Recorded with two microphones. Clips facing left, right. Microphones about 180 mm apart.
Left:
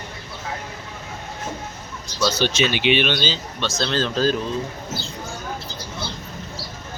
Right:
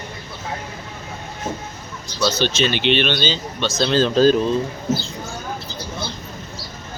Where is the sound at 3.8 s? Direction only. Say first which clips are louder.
Right 7 dB; 15° right (ahead or behind).